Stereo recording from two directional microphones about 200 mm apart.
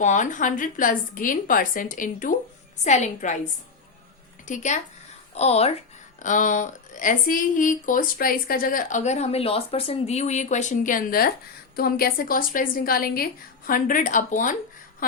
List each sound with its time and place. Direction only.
0.0 s speech: 40° left (ahead or behind)
4.4 s a woman's voice: 35° left (ahead or behind)